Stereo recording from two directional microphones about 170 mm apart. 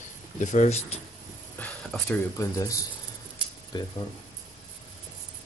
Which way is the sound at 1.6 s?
5° left (ahead or behind).